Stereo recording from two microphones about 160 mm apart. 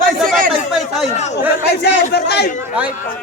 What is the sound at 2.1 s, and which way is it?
Speech, 90° left.